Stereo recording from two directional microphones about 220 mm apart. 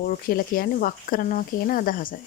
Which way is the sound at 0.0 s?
40° left (ahead or behind).